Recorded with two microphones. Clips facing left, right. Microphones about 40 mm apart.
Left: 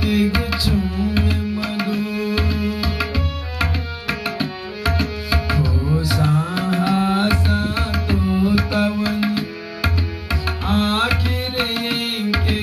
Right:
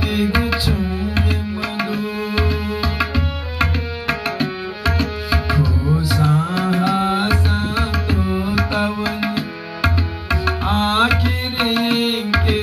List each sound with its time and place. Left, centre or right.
0.0 s tabla: centre
6.7 s music: centre
10.6 s music: centre